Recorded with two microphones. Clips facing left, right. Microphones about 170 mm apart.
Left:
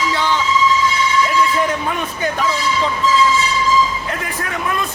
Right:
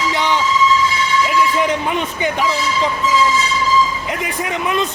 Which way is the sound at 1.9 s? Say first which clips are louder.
Right 2 dB; 20° right (ahead or behind).